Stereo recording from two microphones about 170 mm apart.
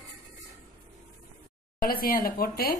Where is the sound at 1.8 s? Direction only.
60° left (ahead or behind).